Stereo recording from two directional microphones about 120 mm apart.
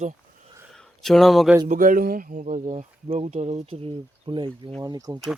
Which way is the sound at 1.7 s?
90° right.